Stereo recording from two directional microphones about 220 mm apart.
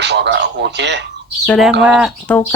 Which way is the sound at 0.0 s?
50° right (ahead or behind).